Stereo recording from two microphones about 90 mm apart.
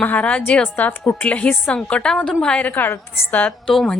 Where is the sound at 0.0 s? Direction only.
20° left (ahead or behind).